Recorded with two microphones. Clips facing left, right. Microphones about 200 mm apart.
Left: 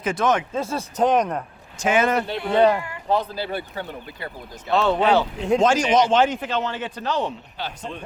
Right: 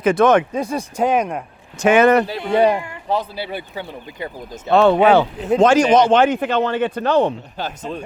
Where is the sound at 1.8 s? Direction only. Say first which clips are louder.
Right 7 dB; 65° right (ahead or behind).